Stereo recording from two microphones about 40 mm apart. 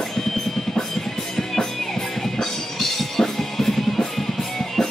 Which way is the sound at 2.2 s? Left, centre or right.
Centre.